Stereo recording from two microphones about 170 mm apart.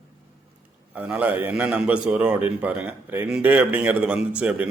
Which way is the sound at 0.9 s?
10° right (ahead or behind).